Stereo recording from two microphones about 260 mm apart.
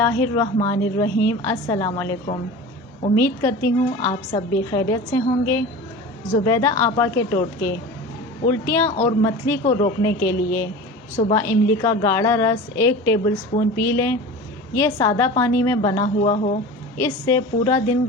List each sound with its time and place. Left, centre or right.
0.0 s a woman's voice: centre
3.2 s a woman's voice: centre
16.3 s speech: left
17.0 s a woman's voice: centre